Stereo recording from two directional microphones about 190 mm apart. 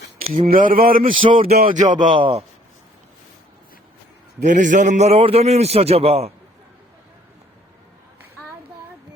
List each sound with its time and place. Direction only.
0.4 s speech: 45° right (ahead or behind)
1.1 s speech: 25° right (ahead or behind)
1.5 s a man's voice: 40° right (ahead or behind)
2.0 s speech: 25° right (ahead or behind)
4.4 s a man's voice: 40° right (ahead or behind)